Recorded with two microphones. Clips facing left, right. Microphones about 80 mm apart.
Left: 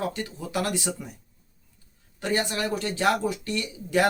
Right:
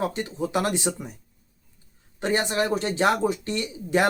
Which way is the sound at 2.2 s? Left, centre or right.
Right.